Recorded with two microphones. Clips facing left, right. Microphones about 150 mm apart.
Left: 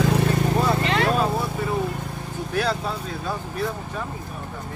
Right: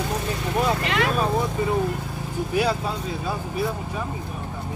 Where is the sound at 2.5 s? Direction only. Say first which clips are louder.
Right 1 dB; 10° right (ahead or behind).